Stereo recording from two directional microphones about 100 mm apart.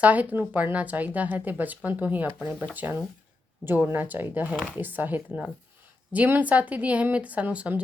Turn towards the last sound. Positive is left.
turn(degrees=-15)  # may be behind; listen again after turning